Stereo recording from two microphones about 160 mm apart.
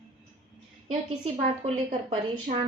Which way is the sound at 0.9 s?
35° right (ahead or behind).